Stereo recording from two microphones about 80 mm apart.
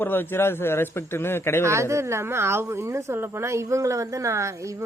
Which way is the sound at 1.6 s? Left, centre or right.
Right.